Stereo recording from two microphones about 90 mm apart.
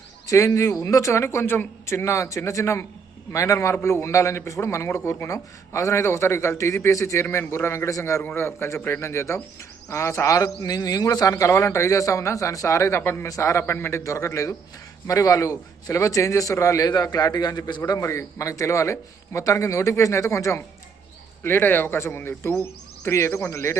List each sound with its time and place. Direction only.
0.3 s a man's voice: 35° left (ahead or behind)
8.2 s a man's voice: 25° left (ahead or behind)
13.2 s a man's voice: 35° left (ahead or behind)